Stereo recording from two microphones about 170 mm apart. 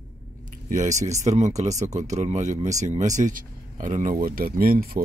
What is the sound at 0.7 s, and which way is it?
Speech, 45° right (ahead or behind).